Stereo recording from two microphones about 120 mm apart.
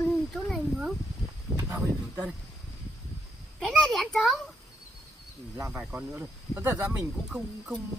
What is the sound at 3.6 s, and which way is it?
Speech, centre (ahead or behind).